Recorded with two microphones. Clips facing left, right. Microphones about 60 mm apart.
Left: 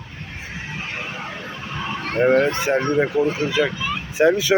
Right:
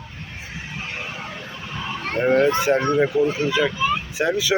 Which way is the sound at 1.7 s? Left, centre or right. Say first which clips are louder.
Left 2 dB; centre.